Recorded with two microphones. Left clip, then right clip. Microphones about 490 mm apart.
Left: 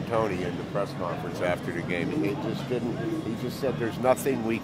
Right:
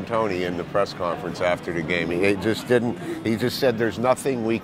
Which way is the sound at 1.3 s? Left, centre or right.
Right.